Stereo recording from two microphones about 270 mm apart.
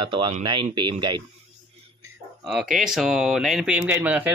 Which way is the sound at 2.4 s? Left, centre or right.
Centre.